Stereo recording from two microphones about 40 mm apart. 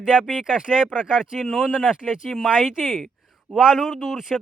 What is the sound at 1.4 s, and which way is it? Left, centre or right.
Speech, centre.